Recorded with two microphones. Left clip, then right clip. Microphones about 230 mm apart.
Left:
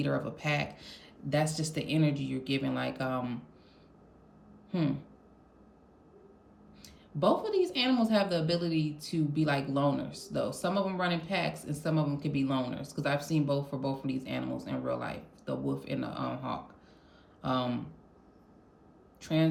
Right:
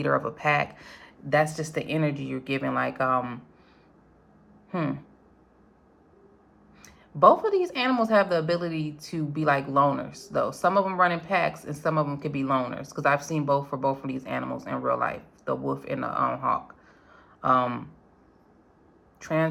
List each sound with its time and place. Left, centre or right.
0.0 s a woman's voice: right
4.7 s speech: right
7.2 s a woman's voice: right